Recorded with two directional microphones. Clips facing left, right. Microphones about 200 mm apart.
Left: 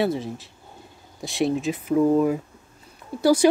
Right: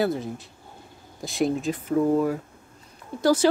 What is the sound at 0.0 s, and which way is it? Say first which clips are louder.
Speech: left 1 dB; centre (ahead or behind).